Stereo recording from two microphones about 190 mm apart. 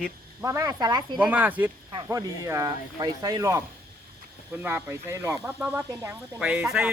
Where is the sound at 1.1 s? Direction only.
5° right (ahead or behind).